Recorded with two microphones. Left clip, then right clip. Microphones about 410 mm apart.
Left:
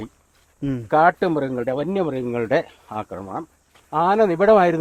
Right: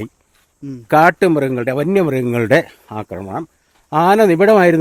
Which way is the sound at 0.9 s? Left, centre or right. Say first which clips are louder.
Right 6 dB; right.